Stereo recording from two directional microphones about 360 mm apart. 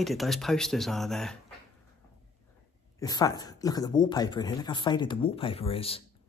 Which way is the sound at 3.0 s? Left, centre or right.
Centre.